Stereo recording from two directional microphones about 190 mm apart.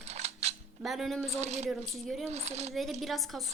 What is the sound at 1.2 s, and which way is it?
Speech, 35° right (ahead or behind).